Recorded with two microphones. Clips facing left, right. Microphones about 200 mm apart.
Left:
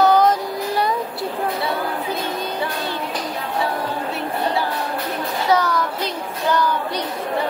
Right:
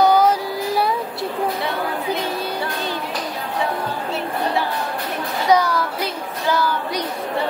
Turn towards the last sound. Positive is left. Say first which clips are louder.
# left 1 dB
turn(degrees=-5)  # may be behind; listen again after turning